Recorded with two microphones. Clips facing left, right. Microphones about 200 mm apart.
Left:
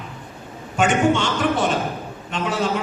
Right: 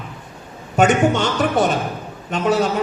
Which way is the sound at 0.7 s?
40° right (ahead or behind).